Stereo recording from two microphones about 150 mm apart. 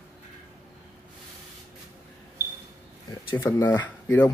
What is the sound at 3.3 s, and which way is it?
Speech, 15° left (ahead or behind).